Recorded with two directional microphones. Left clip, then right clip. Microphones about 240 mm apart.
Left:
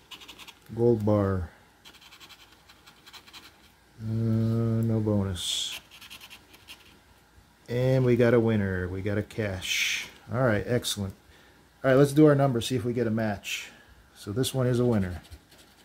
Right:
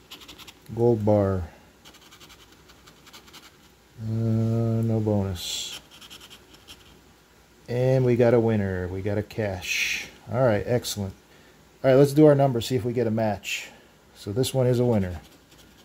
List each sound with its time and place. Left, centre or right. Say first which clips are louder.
0.1 s scratch: right 1 dB; centre
0.7 s speech: right 3 dB; centre
4.4 s a sound: right 3 dB; centre
5.0 s speech: right 2 dB; centre
5.8 s rub: right 1 dB; centre
7.6 s speech: right 3 dB; centre